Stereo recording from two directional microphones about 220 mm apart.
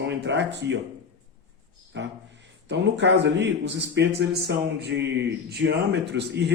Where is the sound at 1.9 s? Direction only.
55° right (ahead or behind).